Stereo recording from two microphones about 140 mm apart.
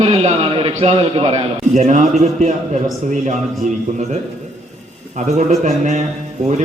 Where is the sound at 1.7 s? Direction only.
60° right (ahead or behind).